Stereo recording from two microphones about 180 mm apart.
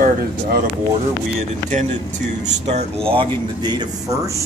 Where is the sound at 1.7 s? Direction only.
40° right (ahead or behind); by 4.4 s 15° right (ahead or behind).